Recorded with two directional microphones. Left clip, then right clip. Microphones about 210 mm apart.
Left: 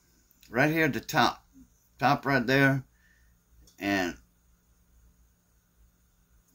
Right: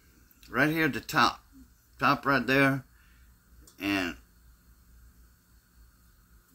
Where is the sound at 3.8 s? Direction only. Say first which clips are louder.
Left 1 dB; 15° left (ahead or behind).